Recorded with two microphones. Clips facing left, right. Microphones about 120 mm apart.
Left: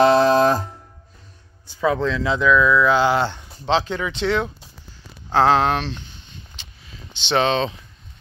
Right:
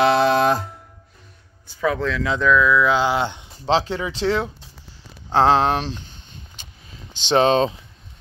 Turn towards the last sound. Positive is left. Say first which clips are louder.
# right 3 dB
turn(degrees=-40)  # may be behind; listen again after turning